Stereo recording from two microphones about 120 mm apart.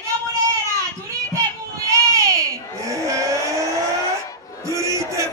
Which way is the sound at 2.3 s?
25° right (ahead or behind).